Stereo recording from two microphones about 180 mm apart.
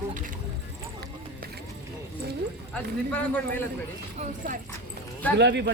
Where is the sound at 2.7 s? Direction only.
10° left (ahead or behind).